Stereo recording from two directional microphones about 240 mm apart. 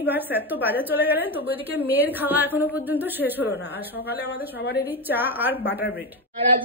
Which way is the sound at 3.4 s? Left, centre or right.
Left.